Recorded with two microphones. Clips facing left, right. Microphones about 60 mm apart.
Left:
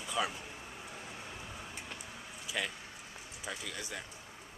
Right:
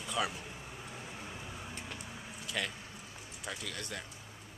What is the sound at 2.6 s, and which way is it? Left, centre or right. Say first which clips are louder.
Speech: even; centre.